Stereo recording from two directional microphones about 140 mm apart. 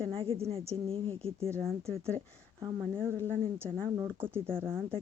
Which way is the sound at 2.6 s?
15° right (ahead or behind).